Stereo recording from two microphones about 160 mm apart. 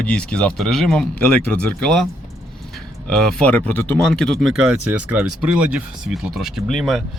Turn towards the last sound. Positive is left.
turn(degrees=0)  # may be behind; listen again after turning